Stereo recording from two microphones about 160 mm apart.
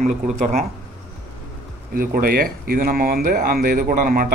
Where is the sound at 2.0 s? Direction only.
65° right (ahead or behind).